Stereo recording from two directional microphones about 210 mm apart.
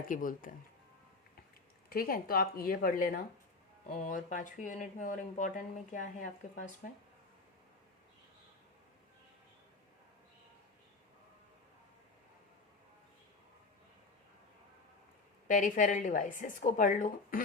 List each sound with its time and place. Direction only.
0.1 s speech: 40° left (ahead or behind)
1.9 s a woman's voice: 45° left (ahead or behind)
15.4 s speech: 40° left (ahead or behind)